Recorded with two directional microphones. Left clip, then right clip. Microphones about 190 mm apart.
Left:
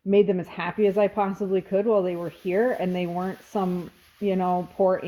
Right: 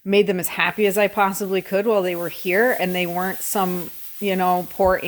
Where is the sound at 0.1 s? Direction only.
5° right (ahead or behind).